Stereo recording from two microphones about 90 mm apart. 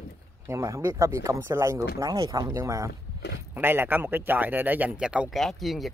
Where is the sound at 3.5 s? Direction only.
25° right (ahead or behind).